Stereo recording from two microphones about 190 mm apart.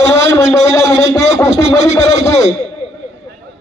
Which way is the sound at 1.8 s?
65° right (ahead or behind).